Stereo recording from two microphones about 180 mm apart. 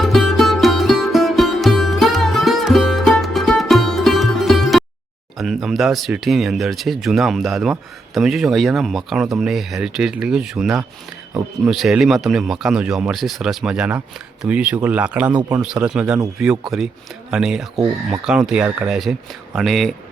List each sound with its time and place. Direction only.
0.0 s music: centre (ahead or behind)
5.4 s speech: centre (ahead or behind)
15.4 s speech: 20° right (ahead or behind)
15.6 s speech: 5° right (ahead or behind)